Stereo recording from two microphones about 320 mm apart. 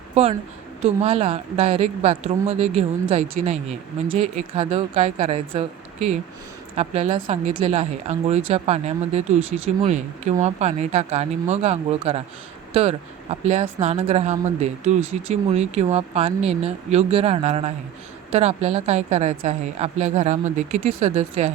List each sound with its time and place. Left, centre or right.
0.1 s a woman's voice: centre